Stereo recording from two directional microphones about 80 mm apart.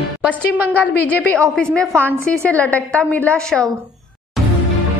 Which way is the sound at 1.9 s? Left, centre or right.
Right.